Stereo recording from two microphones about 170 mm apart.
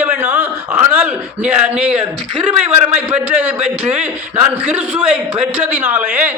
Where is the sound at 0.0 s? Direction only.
10° right (ahead or behind).